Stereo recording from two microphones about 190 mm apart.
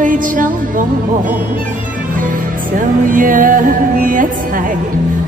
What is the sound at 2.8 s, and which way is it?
Music, 45° right (ahead or behind).